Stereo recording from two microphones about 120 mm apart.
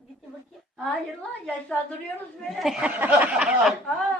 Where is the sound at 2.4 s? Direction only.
Centre (ahead or behind).